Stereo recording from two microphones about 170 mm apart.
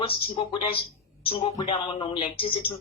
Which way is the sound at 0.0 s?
30° left (ahead or behind).